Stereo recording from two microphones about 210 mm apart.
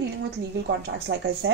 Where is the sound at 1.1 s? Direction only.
60° right (ahead or behind).